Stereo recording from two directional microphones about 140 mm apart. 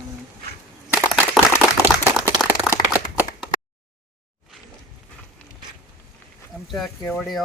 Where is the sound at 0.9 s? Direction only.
10° right (ahead or behind).